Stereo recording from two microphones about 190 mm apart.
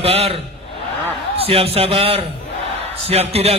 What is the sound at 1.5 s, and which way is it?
A man's voice, 30° right (ahead or behind).